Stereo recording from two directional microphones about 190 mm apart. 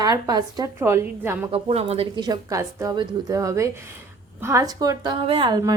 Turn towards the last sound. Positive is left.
turn(degrees=-25)  # may be behind; listen again after turning